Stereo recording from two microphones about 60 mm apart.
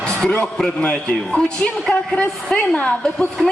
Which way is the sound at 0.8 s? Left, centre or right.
Left.